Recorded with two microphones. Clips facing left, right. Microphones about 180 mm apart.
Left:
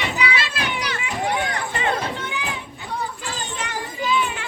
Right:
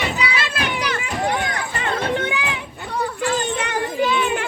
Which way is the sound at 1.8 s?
65° right (ahead or behind).